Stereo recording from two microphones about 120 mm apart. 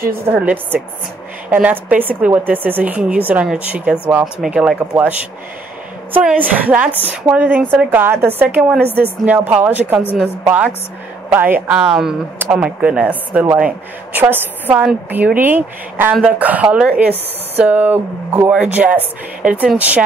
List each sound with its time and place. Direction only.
0.3 s a woman's voice: 15° right (ahead or behind)
6.2 s a woman's voice: 15° right (ahead or behind)
11.2 s a woman's voice: 15° right (ahead or behind)